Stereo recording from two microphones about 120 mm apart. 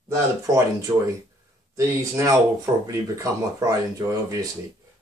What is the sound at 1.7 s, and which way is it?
Speech, 25° right (ahead or behind).